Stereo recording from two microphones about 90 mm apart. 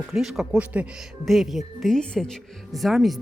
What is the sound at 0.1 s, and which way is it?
Speech, 5° right (ahead or behind).